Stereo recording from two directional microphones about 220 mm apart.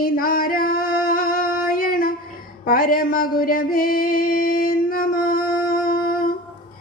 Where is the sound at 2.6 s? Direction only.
40° left (ahead or behind).